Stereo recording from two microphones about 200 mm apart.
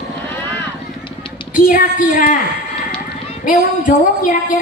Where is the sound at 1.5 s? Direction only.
45° left (ahead or behind).